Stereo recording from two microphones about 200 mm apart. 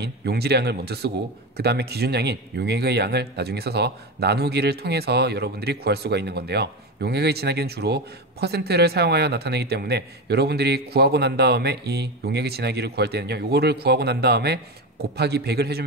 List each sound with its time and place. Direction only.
0.0 s speech: 55° right (ahead or behind)